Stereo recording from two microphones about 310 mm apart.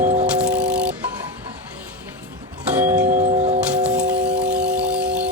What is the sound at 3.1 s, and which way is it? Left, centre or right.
Tubular bells, right.